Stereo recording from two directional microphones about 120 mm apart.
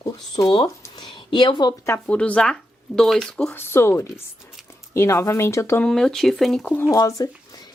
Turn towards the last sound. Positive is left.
turn(degrees=30)  # may be behind; listen again after turning